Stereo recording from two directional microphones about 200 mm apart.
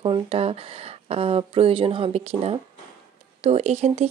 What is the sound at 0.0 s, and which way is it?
Speech, 25° right (ahead or behind).